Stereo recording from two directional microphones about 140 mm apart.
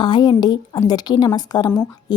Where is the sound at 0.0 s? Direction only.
35° left (ahead or behind).